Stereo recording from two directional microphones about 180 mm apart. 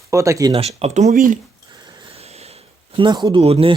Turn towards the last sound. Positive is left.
turn(degrees=-30)  # may be behind; listen again after turning